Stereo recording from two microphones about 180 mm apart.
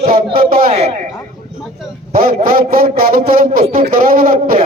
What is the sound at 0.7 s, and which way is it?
Speech, 35° right (ahead or behind).